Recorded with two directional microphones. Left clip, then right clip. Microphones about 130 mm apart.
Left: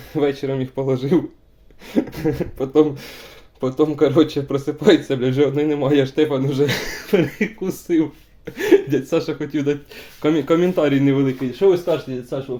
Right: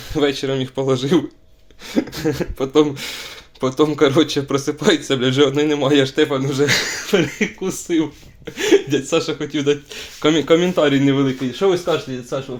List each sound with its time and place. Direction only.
0.1 s speech: 35° left (ahead or behind)
1.9 s a sound: 50° left (ahead or behind)
2.3 s speech: 25° left (ahead or behind)